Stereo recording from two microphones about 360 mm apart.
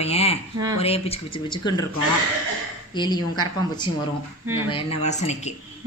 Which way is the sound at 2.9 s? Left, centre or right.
Centre.